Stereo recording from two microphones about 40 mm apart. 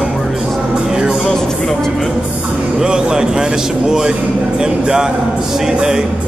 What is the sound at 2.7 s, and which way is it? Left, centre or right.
A man's voice, centre.